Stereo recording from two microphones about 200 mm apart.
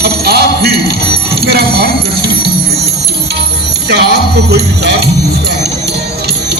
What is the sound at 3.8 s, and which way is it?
Music, 55° right (ahead or behind).